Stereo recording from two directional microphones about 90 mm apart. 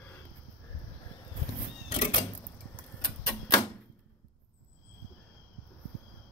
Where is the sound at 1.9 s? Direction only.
90° left.